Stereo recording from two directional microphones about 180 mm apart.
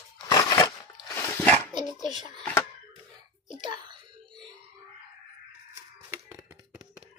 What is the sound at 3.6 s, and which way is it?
Child singing, 25° right (ahead or behind).